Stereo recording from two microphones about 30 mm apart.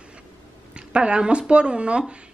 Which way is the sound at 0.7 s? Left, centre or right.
Right.